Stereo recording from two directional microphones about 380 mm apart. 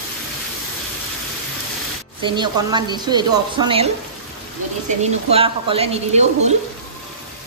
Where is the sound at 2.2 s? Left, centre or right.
Centre.